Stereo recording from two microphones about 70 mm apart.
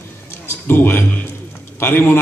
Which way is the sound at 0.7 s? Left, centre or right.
Left.